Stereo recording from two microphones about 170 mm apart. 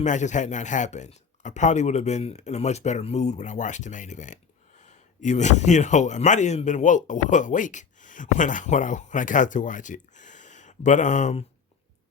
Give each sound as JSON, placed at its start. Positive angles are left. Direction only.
{"t": 0.0, "sound": "speech", "side_deg": 45}